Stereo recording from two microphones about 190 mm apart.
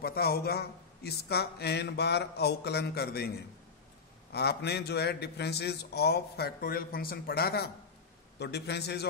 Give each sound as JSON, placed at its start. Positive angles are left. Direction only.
{"t": 0.0, "sound": "a man's voice", "side_deg": 55}
{"t": 4.3, "sound": "a man's voice", "side_deg": 60}